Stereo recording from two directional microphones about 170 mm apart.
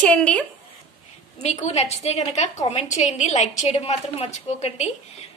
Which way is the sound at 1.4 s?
40° left (ahead or behind).